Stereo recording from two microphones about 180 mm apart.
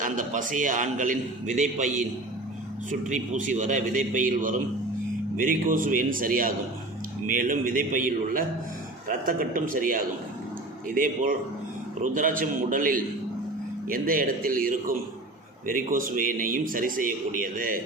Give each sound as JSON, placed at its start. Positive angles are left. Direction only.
{"t": 0.0, "sound": "a man's voice", "side_deg": -45}